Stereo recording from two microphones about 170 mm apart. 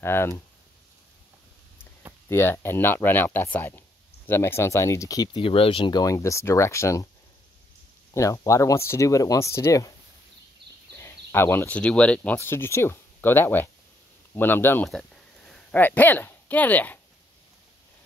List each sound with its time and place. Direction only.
0.0 s speech: 15° left (ahead or behind)
2.2 s speech: 15° left (ahead or behind)
8.1 s speech: 20° left (ahead or behind)
11.0 s speech: 15° left (ahead or behind)